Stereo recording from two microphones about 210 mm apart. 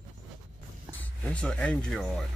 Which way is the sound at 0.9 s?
5° left (ahead or behind).